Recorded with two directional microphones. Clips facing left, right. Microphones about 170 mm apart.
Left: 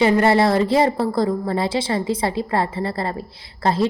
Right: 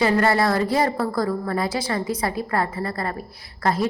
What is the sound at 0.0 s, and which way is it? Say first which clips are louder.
A woman's voice: left 4 dB; 25° left (ahead or behind).